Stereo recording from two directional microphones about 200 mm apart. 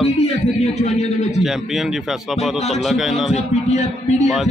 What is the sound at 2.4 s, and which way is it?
A man's voice, centre (ahead or behind).